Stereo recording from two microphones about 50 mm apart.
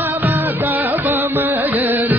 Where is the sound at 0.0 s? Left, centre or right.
Right.